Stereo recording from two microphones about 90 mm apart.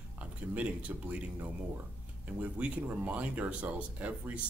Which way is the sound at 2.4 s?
15° right (ahead or behind).